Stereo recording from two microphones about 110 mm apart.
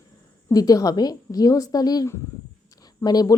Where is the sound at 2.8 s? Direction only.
35° left (ahead or behind).